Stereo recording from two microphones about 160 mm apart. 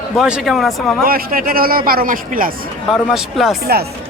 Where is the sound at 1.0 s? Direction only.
65° right (ahead or behind).